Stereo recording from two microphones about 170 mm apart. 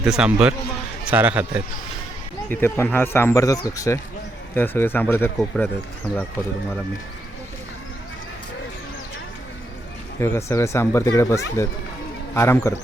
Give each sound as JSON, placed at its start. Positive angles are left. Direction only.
{"t": 0.0, "sound": "a man's voice", "side_deg": -5}
{"t": 2.5, "sound": "speech", "side_deg": 10}
{"t": 10.2, "sound": "speech", "side_deg": 15}